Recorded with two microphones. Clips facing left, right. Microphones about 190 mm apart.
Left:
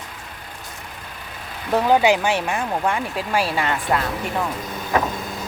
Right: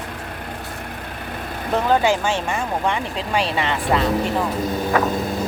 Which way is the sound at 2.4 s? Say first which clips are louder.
Even; centre (ahead or behind).